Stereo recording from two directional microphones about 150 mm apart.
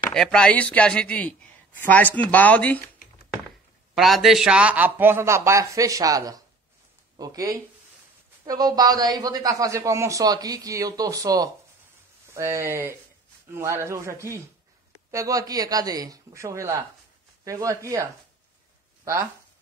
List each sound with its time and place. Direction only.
0.1 s speech: 5° left (ahead or behind)
3.9 s speech: centre (ahead or behind); by 18.0 s 20° right (ahead or behind)